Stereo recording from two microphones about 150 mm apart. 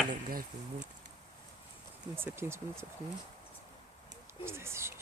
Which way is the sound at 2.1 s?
15° right (ahead or behind).